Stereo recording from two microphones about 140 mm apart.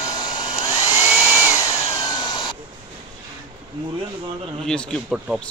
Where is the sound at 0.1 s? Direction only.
30° left (ahead or behind).